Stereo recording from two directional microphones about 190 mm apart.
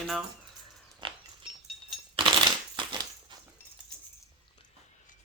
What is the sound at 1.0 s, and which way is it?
Dog, 25° right (ahead or behind).